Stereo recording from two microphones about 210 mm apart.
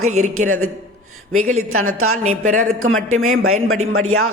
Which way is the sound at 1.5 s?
90° right.